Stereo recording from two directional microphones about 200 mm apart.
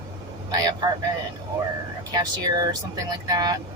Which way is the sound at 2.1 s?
20° right (ahead or behind).